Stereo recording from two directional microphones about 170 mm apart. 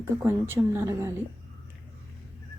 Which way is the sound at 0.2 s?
15° right (ahead or behind).